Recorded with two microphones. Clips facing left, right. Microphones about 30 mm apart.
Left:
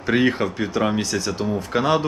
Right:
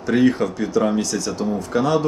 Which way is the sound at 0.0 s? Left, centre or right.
Left.